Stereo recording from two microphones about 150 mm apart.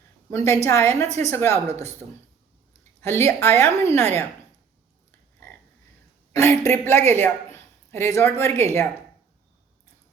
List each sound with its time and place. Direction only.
0.3 s a woman's voice: 20° left (ahead or behind)
3.0 s a woman's voice: 15° left (ahead or behind)
6.3 s a woman's voice: 15° left (ahead or behind)